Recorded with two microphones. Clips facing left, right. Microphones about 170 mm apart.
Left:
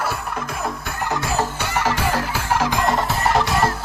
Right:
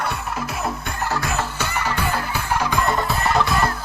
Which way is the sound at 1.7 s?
90° left.